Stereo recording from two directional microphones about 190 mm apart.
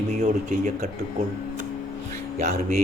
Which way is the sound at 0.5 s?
45° right (ahead or behind).